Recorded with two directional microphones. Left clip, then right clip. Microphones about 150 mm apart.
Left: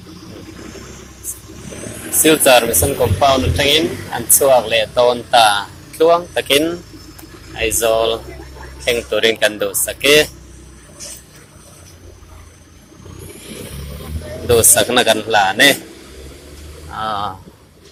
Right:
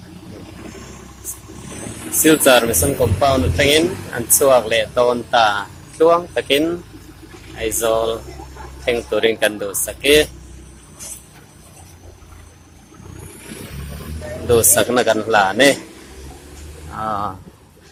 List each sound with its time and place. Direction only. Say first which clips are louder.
2.2 s a man's voice: left 2 dB; 20° right (ahead or behind)
14.4 s a man's voice: left 2 dB; 20° right (ahead or behind)
16.9 s speech: left 1 dB; 15° right (ahead or behind)